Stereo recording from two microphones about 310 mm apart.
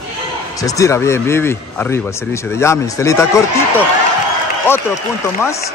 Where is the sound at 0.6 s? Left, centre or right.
Centre.